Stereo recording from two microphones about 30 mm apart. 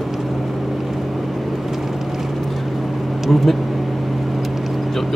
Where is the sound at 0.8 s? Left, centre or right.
Centre.